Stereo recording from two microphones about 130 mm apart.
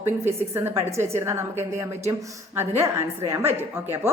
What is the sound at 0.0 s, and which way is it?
A woman's voice, 15° right (ahead or behind).